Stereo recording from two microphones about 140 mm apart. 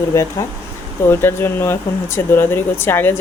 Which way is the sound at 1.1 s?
15° left (ahead or behind).